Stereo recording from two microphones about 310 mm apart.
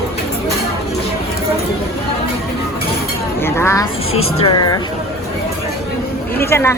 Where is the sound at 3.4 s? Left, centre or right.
Centre.